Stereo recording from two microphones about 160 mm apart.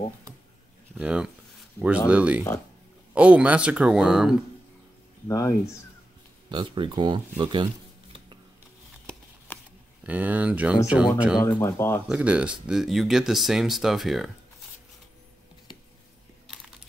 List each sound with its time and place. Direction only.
0.9 s speech: 5° right (ahead or behind)
5.3 s speech: 20° left (ahead or behind)
6.5 s speech: 30° right (ahead or behind)
9.5 s a sound: 15° left (ahead or behind)
10.0 s speech: 10° right (ahead or behind)
11.4 s speech: 20° left (ahead or behind)
12.1 s speech: 10° right (ahead or behind)